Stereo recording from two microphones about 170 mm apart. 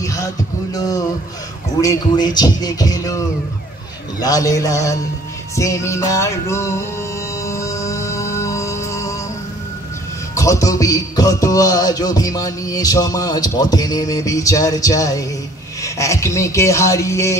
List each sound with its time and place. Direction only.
0.0 s a sound: 20° left (ahead or behind)
0.7 s music: 20° left (ahead or behind)
5.6 s speech: 20° left (ahead or behind)
7.4 s music: 20° left (ahead or behind)
10.3 s music: 20° left (ahead or behind)
15.8 s speech: 20° left (ahead or behind)